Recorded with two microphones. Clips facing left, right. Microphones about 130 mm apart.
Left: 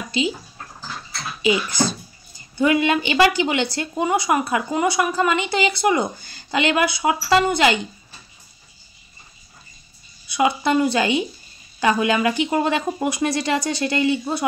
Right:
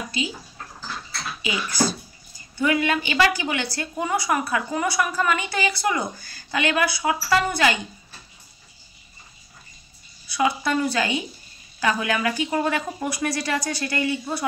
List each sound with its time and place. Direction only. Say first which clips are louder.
0.2 s speech: left 7 dB; 25° left (ahead or behind)
1.4 s speech: left 5 dB; 20° left (ahead or behind)
10.2 s speech: left 3 dB; 20° left (ahead or behind)